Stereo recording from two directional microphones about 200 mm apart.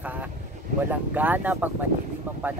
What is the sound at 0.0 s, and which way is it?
Vehicle, 10° right (ahead or behind).